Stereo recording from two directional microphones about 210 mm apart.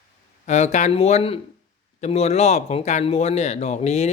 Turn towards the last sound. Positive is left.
turn(degrees=30)  # may be behind; listen again after turning